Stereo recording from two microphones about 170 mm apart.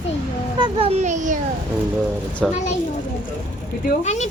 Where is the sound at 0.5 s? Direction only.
30° right (ahead or behind); by 1.4 s 45° right (ahead or behind).